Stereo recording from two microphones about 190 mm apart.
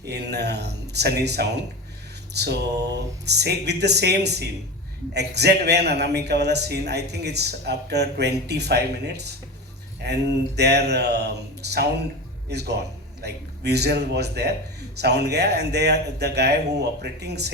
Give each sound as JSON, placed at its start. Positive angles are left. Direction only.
{"t": 0.0, "sound": "a man's voice", "side_deg": -60}